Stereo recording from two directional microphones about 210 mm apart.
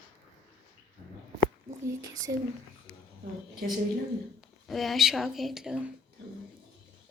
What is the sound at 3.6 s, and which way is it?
Speech, 45° right (ahead or behind).